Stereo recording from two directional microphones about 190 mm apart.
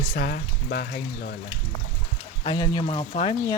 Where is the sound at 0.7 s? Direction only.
55° left (ahead or behind).